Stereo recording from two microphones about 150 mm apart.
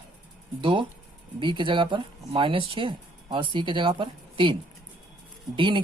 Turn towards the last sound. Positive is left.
turn(degrees=-35)  # may be behind; listen again after turning